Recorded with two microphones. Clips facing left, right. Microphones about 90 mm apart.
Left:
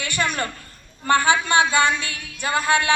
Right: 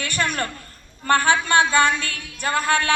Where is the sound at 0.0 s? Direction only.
15° left (ahead or behind).